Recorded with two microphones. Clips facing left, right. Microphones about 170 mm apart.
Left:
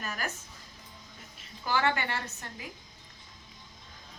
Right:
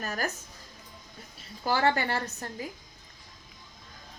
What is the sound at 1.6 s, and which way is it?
A woman's voice, 35° right (ahead or behind).